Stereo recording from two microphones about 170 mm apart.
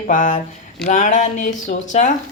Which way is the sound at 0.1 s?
45° left (ahead or behind).